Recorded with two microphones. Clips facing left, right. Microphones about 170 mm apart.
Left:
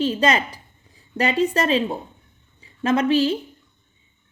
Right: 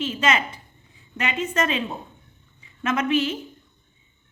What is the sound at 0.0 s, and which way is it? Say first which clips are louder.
A woman's voice: left 4 dB; 35° left (ahead or behind).